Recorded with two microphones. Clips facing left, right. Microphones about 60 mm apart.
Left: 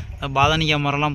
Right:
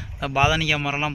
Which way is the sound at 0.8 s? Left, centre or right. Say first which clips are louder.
Left 4 dB; centre.